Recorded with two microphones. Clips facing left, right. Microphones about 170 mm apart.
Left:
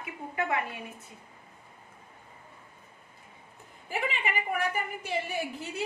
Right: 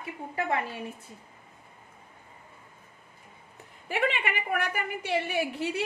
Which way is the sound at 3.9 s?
70° right (ahead or behind).